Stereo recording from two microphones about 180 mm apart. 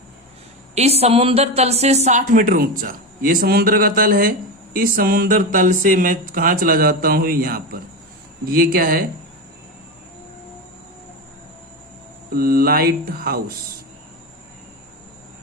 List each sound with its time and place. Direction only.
0.8 s speech: 35° right (ahead or behind); by 7.8 s 50° right (ahead or behind)
8.4 s mantra: 55° right (ahead or behind)
12.3 s mantra: 55° right (ahead or behind)